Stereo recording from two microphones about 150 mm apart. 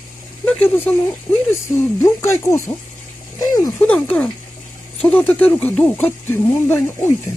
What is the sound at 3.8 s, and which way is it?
Speech, 10° left (ahead or behind).